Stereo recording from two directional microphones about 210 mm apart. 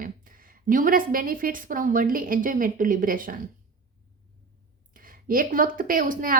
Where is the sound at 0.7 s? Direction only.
40° right (ahead or behind).